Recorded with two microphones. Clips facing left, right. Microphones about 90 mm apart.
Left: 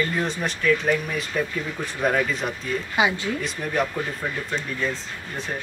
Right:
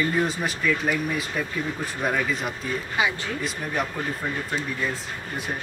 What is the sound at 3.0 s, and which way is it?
Speech, 20° left (ahead or behind).